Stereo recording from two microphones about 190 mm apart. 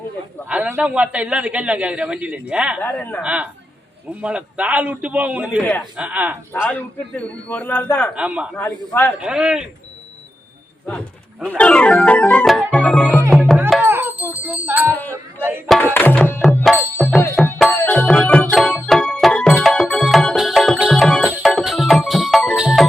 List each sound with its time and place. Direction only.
0.4 s a man's voice: 5° right (ahead or behind)
2.8 s speech: 10° left (ahead or behind)
3.2 s a man's voice: 5° right (ahead or behind)
6.5 s speech: 10° left (ahead or behind)
8.1 s speech: 5° right (ahead or behind)
8.5 s speech: 10° left (ahead or behind)
9.2 s speech: 5° right (ahead or behind)
10.8 s music: 5° left (ahead or behind)
13.8 s music: 10° right (ahead or behind)
15.4 s a man's voice: 10° right (ahead or behind)
15.7 s tabla: 10° left (ahead or behind)
17.0 s music: centre (ahead or behind)
17.7 s music: 10° left (ahead or behind)